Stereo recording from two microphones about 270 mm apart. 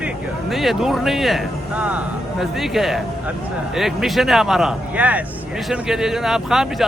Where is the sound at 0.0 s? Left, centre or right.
Centre.